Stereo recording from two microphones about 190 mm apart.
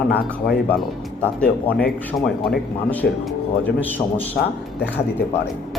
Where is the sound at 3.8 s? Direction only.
10° left (ahead or behind).